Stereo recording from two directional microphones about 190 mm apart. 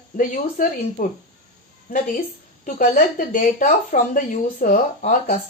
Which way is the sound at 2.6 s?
45° left (ahead or behind).